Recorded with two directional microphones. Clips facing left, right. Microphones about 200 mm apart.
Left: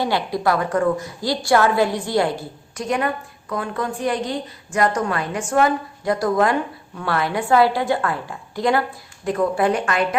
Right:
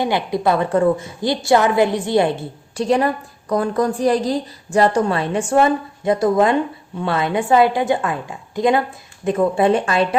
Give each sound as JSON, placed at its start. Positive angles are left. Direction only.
{"t": 0.0, "sound": "a woman's voice", "side_deg": -20}